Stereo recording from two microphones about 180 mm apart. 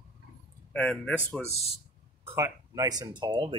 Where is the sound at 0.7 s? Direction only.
5° left (ahead or behind).